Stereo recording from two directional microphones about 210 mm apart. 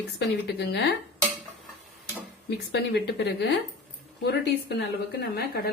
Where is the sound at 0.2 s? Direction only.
50° left (ahead or behind).